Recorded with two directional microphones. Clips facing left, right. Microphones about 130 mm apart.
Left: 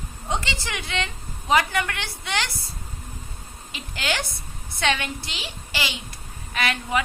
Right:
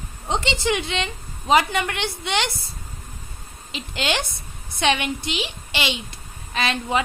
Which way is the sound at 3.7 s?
20° right (ahead or behind).